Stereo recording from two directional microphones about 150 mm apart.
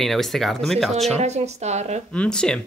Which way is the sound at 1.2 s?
50° right (ahead or behind).